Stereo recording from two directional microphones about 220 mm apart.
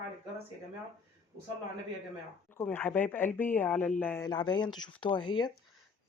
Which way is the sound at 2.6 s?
10° left (ahead or behind).